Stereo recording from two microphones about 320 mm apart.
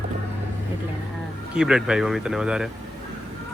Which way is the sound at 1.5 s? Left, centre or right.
Centre.